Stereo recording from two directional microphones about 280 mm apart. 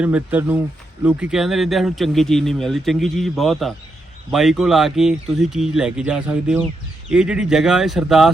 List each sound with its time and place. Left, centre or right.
0.0 s speech: centre